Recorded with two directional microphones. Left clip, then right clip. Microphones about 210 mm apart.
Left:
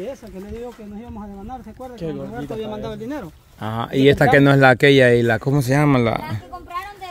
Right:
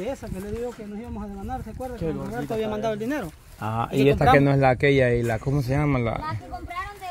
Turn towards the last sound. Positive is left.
turn(degrees=35)  # may be behind; listen again after turning